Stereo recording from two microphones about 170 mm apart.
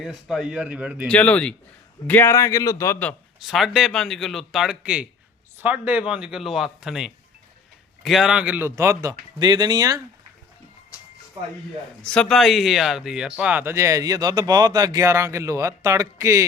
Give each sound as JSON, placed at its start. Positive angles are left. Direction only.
{"t": 0.0, "sound": "speech", "side_deg": -5}
{"t": 1.0, "sound": "a man's voice", "side_deg": 10}
{"t": 3.4, "sound": "a man's voice", "side_deg": 0}
{"t": 10.9, "sound": "a sound", "side_deg": 20}
{"t": 12.0, "sound": "speech", "side_deg": 5}